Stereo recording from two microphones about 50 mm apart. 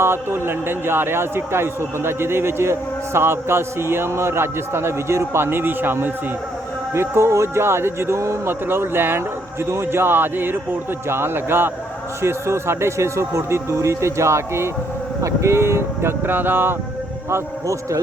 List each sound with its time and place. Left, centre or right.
0.0 s a man's voice: right
6.9 s a man's voice: right
8.4 s a man's voice: right
12.2 s speech: right
15.2 s a man's voice: right
17.2 s speech: right